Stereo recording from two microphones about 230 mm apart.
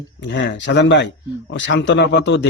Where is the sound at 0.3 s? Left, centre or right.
Left.